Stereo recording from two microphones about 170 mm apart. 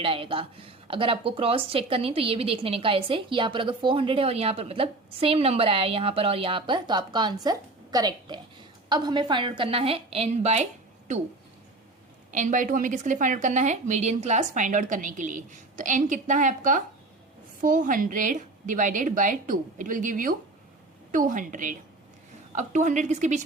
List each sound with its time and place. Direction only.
0.0 s a woman's voice: 30° right (ahead or behind)
12.3 s a woman's voice: 50° right (ahead or behind)